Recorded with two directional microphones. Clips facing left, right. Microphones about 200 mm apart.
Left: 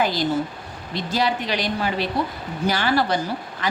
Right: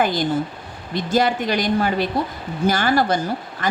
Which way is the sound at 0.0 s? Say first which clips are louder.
Right 2 dB; 50° right (ahead or behind).